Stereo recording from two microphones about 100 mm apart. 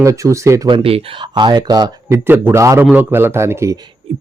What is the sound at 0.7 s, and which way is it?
Speech, 70° right (ahead or behind).